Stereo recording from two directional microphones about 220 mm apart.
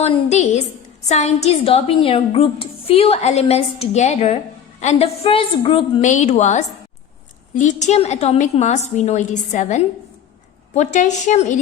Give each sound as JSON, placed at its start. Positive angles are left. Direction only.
{"t": 0.0, "sound": "a woman's voice", "side_deg": 30}